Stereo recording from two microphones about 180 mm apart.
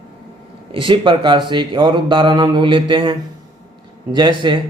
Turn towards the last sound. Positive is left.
turn(degrees=-25)  # may be behind; listen again after turning